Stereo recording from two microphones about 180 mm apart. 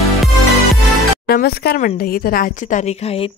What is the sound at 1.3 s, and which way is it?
Speech, 60° left (ahead or behind).